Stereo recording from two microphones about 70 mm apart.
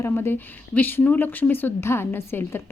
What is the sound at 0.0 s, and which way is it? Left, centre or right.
Speech, left.